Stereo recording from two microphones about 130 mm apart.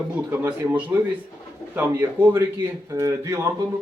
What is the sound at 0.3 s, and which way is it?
A man's voice, 15° right (ahead or behind).